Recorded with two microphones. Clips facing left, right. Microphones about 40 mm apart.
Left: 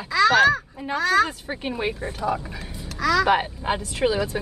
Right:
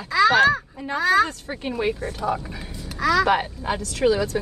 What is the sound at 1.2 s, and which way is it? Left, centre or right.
Speech, centre.